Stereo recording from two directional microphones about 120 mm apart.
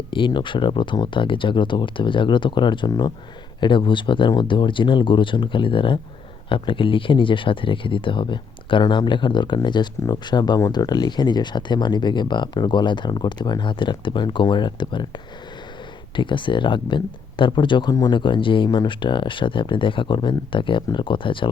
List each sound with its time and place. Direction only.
0.1 s speech: 40° left (ahead or behind)
16.1 s speech: 40° left (ahead or behind)